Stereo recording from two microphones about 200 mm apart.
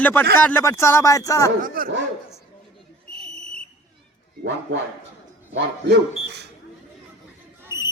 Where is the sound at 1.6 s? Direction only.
45° right (ahead or behind).